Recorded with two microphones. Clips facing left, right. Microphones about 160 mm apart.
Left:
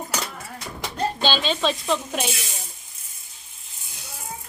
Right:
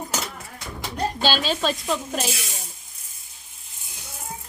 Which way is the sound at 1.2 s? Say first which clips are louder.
Even; 5° right (ahead or behind).